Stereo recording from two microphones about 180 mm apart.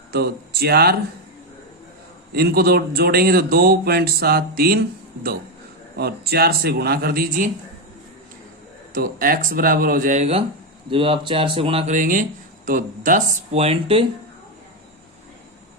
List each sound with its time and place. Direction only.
0.1 s speech: 60° right (ahead or behind)
2.3 s speech: 60° right (ahead or behind)
6.0 s speech: 60° right (ahead or behind)
8.9 s speech: 55° right (ahead or behind); by 11.9 s 30° right (ahead or behind)
11.9 s speech: 45° right (ahead or behind); by 14.0 s 30° right (ahead or behind)